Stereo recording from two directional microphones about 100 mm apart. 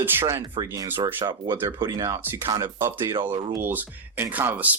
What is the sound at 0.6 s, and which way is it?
Speech, 40° right (ahead or behind).